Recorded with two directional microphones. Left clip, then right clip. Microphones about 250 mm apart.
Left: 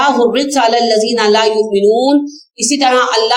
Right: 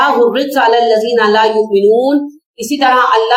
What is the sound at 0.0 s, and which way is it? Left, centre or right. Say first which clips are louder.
A woman's voice: right 1 dB; left.